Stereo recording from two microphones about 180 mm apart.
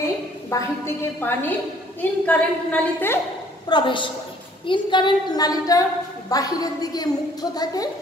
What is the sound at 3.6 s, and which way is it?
A woman's voice, 25° left (ahead or behind).